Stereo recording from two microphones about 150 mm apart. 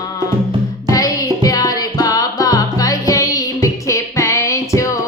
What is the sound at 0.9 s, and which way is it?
Music, 25° left (ahead or behind).